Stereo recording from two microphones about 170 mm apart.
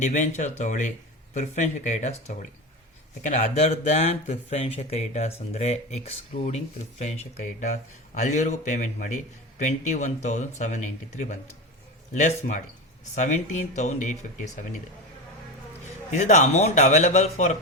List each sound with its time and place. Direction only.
0.0 s speech: 45° left (ahead or behind)
16.1 s speech: 45° left (ahead or behind)